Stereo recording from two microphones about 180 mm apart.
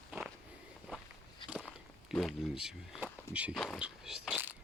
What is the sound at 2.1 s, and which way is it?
Speech, centre (ahead or behind).